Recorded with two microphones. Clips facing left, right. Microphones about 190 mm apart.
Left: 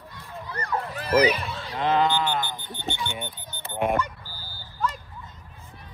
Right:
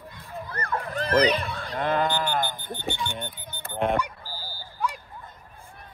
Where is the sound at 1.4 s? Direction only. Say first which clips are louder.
Left 1 dB; 55° right (ahead or behind).